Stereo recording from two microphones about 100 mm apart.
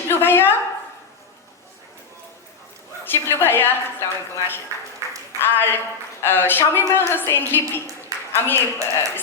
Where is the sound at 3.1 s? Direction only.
20° left (ahead or behind).